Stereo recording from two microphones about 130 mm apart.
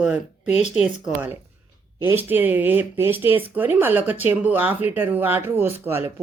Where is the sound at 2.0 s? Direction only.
15° right (ahead or behind).